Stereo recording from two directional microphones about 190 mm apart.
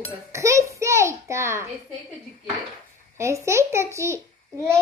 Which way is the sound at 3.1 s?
15° right (ahead or behind).